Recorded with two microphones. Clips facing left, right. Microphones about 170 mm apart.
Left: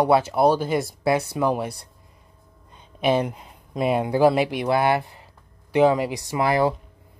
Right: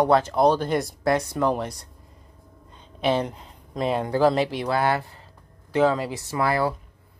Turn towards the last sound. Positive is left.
turn(degrees=20)  # may be behind; listen again after turning